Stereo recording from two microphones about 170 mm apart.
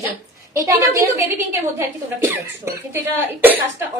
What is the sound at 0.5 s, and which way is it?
A woman's voice, 15° right (ahead or behind).